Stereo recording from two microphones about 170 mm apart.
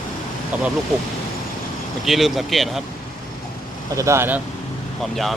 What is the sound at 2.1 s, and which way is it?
Speech, centre (ahead or behind).